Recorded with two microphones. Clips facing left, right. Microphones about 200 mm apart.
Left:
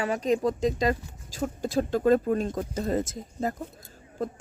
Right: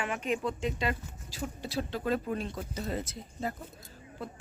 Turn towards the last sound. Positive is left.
turn(degrees=45)  # may be behind; listen again after turning